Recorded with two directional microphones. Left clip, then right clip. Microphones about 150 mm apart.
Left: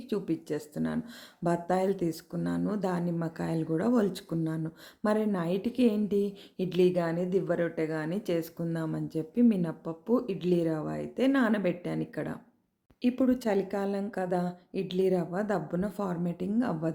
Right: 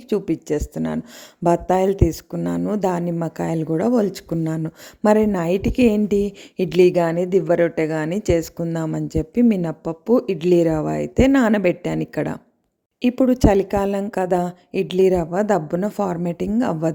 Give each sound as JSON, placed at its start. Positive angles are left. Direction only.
{"t": 0.1, "sound": "speech", "side_deg": -50}